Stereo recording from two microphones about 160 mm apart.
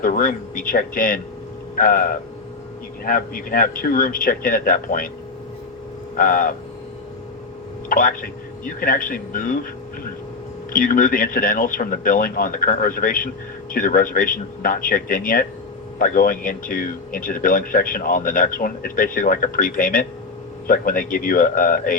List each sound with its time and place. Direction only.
0.0 s speech: 60° left (ahead or behind)
6.1 s speech: 60° left (ahead or behind)
7.9 s speech: 60° left (ahead or behind)
10.7 s speech: 60° left (ahead or behind)